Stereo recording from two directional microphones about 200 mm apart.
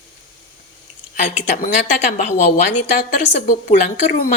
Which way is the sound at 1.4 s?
35° left (ahead or behind).